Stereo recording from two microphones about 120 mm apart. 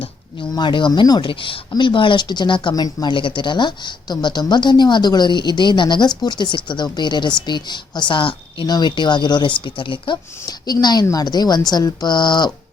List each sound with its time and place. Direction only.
0.5 s speech: 40° left (ahead or behind)